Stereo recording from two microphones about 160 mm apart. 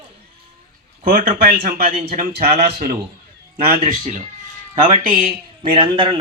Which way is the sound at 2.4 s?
50° right (ahead or behind).